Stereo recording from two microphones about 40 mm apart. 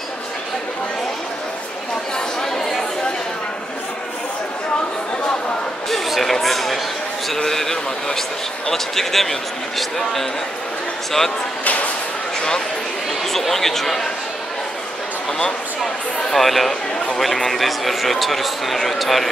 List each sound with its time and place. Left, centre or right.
2.1 s chatter: centre
5.9 s a sound: centre
7.3 s speech: centre
13.2 s speech: centre
15.8 s speech: centre